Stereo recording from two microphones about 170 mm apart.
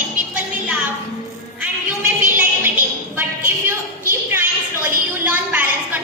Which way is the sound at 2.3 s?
10° right (ahead or behind).